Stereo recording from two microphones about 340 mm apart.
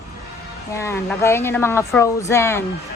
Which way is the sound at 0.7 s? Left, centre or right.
Centre.